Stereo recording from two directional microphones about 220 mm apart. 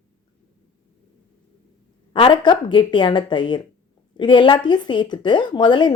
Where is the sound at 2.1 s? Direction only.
20° left (ahead or behind).